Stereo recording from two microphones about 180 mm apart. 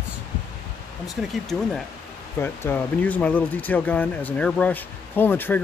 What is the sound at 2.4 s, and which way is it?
Speech, 15° left (ahead or behind).